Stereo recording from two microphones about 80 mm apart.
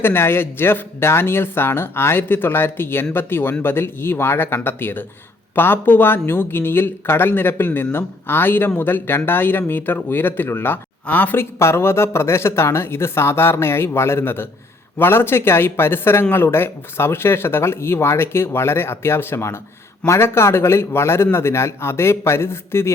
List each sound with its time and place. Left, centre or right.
0.0 s speech: left
11.6 s speech: left